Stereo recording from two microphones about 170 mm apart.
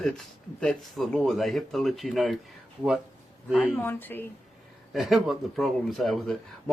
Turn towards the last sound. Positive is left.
turn(degrees=0)  # may be behind; listen again after turning